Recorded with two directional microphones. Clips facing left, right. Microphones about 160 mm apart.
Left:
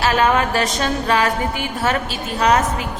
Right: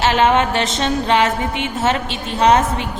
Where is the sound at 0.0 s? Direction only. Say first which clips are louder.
Right 2 dB; 25° right (ahead or behind).